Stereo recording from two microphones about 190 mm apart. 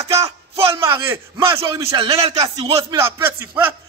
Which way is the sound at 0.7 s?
15° right (ahead or behind).